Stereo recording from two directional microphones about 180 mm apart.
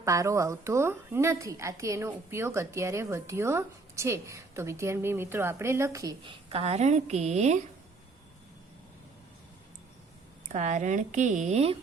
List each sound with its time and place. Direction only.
0.0 s a woman's voice: 15° right (ahead or behind)
6.5 s a woman's voice: 35° right (ahead or behind)
10.5 s speech: 40° right (ahead or behind)